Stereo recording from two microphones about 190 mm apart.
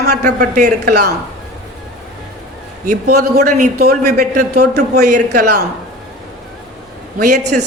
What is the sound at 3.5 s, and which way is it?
A man's voice, 55° right (ahead or behind).